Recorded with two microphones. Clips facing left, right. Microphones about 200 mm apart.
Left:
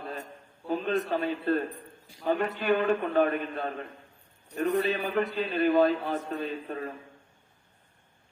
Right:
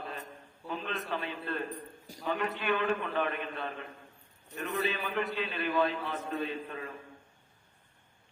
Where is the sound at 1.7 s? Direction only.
40° right (ahead or behind).